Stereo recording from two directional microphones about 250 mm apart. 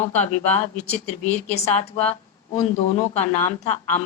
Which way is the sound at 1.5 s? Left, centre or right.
Left.